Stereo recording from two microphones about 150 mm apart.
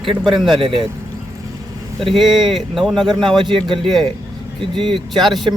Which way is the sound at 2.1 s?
Centre (ahead or behind).